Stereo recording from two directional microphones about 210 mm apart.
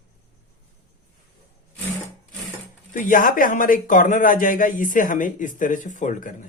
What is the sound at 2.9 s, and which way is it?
Speech, 40° left (ahead or behind).